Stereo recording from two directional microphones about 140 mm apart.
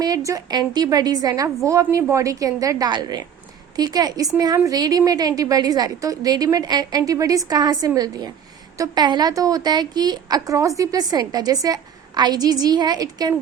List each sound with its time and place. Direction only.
0.0 s a woman's voice: 25° right (ahead or behind)